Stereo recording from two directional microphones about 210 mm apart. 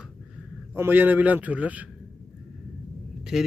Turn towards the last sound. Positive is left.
turn(degrees=0)  # may be behind; listen again after turning